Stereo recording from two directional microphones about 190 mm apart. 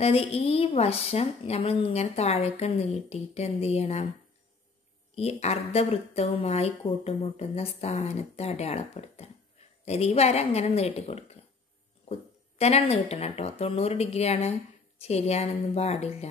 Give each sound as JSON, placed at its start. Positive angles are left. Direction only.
{"t": 0.0, "sound": "speech", "side_deg": 30}
{"t": 5.1, "sound": "speech", "side_deg": 35}